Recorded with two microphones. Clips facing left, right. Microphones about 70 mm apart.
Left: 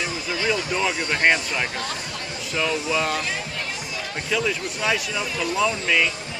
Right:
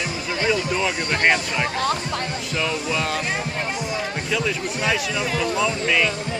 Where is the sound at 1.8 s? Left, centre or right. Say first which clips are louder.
Right 8 dB; right.